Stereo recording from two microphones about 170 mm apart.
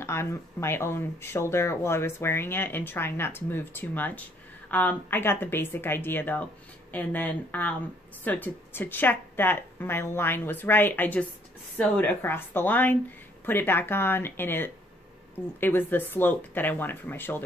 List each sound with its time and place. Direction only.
0.0 s speech: 15° left (ahead or behind)